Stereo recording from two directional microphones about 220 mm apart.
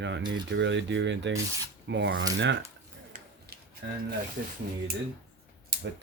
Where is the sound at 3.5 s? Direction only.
45° right (ahead or behind).